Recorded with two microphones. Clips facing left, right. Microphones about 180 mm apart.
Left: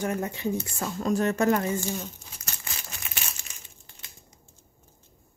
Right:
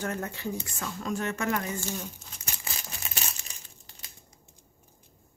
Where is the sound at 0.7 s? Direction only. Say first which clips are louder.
Left 6 dB; 35° left (ahead or behind).